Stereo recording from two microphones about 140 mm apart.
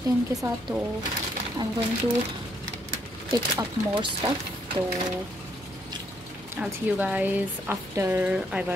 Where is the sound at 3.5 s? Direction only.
35° right (ahead or behind).